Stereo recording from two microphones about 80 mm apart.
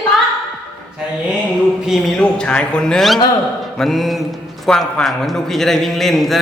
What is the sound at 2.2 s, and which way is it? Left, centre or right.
A man's voice, centre.